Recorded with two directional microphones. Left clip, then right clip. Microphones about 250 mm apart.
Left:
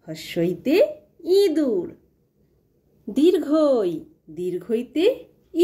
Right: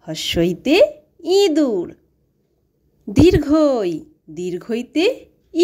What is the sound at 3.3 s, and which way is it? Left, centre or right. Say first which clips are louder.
Speech: right 4 dB; right.